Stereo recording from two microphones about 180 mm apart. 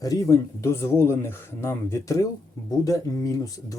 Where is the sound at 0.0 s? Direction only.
20° left (ahead or behind).